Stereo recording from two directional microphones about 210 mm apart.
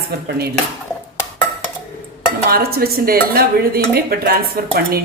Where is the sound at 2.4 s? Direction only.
45° right (ahead or behind).